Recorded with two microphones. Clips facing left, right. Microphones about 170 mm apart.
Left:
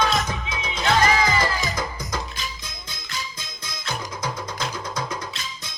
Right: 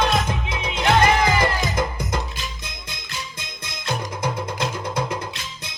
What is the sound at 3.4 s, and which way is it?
Music, 60° right (ahead or behind).